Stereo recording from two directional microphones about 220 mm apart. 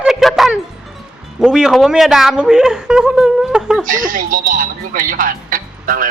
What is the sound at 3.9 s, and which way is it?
Speech, 35° right (ahead or behind).